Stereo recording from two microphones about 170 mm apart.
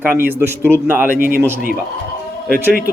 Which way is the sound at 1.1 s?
55° right (ahead or behind).